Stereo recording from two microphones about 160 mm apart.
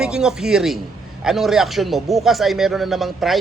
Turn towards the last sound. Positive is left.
turn(degrees=0)  # may be behind; listen again after turning